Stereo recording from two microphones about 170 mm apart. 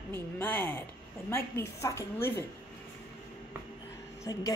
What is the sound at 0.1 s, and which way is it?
Speech, 10° left (ahead or behind).